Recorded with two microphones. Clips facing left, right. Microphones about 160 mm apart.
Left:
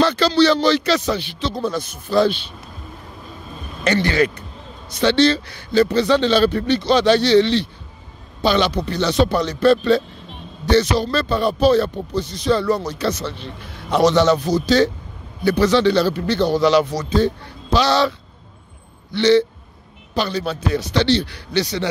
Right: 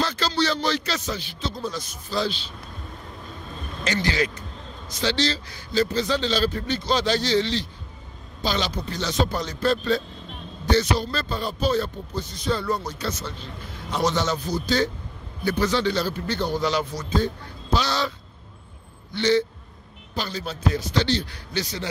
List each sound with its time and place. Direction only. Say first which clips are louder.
0.0 s speech: left 9 dB; 70° left (ahead or behind)
3.8 s speech: left 7 dB; 60° left (ahead or behind); by 14.9 s 90° left
15.4 s speech: left 7 dB; 75° left (ahead or behind)
19.1 s speech: left 7 dB; 75° left (ahead or behind)